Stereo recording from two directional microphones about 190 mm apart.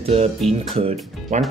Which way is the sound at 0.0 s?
30° right (ahead or behind).